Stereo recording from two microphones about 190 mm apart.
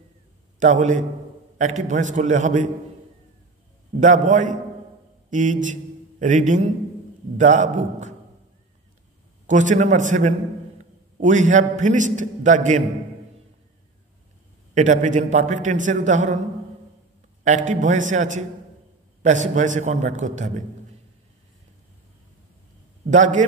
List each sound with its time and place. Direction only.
0.6 s a man's voice: 40° right (ahead or behind)
4.0 s a man's voice: 40° right (ahead or behind)
9.5 s a man's voice: 40° right (ahead or behind)
14.7 s a man's voice: 40° right (ahead or behind)
17.4 s a man's voice: 40° right (ahead or behind)
23.0 s a man's voice: 40° right (ahead or behind)